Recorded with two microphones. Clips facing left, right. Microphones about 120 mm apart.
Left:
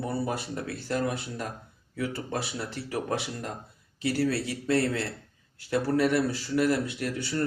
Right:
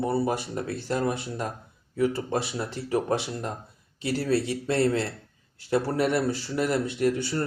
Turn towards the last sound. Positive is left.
turn(degrees=-25)  # may be behind; listen again after turning